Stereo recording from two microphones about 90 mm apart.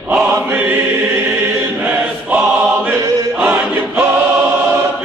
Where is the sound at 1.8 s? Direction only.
20° right (ahead or behind).